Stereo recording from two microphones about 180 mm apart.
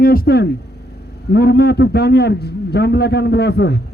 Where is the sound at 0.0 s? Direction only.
55° left (ahead or behind).